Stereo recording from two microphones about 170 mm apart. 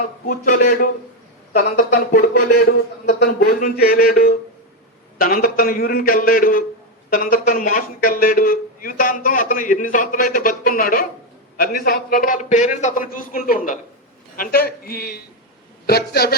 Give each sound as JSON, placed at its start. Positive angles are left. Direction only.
{"t": 0.3, "sound": "a man's voice", "side_deg": 55}